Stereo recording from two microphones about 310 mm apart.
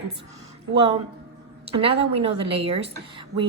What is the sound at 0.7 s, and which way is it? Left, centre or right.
A woman's voice, centre.